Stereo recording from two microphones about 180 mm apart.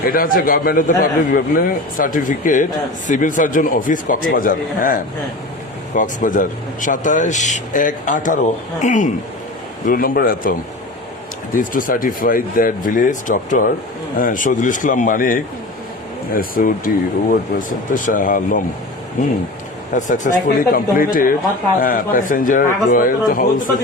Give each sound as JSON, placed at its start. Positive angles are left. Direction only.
{"t": 0.0, "sound": "a man's voice", "side_deg": 55}
{"t": 11.5, "sound": "a man's voice", "side_deg": 50}
{"t": 19.9, "sound": "a man's voice", "side_deg": 45}